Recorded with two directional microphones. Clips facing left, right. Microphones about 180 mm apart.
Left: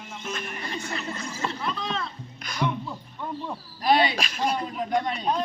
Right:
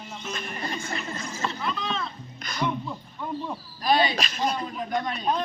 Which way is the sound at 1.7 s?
35° left (ahead or behind).